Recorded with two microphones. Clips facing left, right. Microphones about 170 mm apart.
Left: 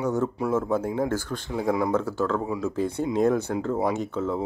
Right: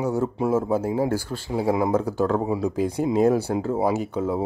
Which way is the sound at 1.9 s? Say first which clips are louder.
Right 3 dB; 15° right (ahead or behind).